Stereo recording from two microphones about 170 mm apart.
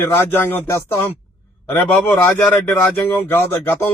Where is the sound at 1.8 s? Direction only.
10° left (ahead or behind).